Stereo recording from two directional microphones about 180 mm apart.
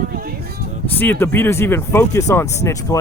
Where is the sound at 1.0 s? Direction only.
10° left (ahead or behind).